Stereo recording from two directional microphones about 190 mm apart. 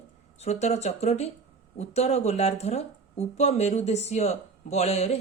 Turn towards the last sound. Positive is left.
turn(degrees=35)  # may be behind; listen again after turning